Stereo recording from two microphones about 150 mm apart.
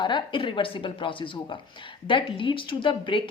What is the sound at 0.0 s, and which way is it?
A woman's voice, 30° left (ahead or behind).